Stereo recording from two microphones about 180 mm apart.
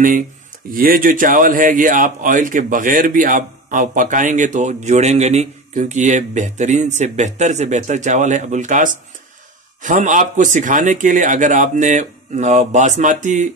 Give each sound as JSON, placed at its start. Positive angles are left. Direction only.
{"t": 0.7, "sound": "speech", "side_deg": -50}